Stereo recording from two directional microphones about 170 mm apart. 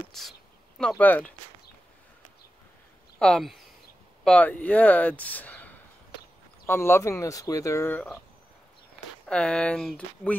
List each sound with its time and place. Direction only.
0.1 s a sound: centre (ahead or behind)
3.2 s speech: 5° left (ahead or behind)
9.3 s speech: 5° left (ahead or behind)